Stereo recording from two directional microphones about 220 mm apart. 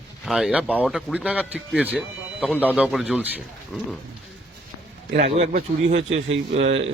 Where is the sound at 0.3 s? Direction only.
Centre (ahead or behind).